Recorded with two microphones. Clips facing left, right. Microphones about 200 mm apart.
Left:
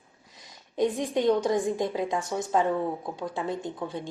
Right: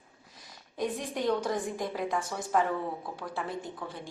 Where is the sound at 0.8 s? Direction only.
20° left (ahead or behind).